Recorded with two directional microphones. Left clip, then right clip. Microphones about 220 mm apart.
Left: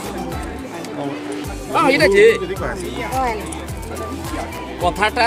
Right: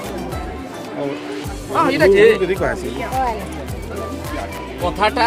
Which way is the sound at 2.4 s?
Centre (ahead or behind).